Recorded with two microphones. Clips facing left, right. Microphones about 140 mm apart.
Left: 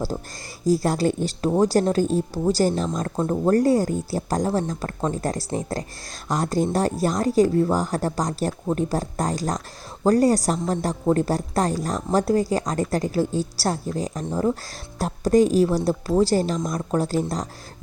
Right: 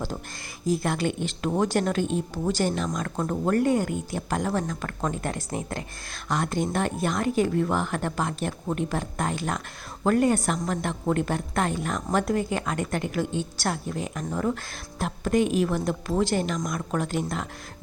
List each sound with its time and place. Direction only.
0.6 s speech: 40° left (ahead or behind)